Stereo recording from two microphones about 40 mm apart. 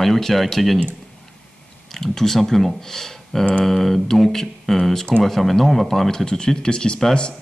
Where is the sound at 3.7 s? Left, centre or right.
Centre.